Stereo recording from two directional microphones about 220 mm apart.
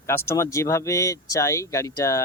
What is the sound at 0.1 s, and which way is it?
Speech, 10° left (ahead or behind).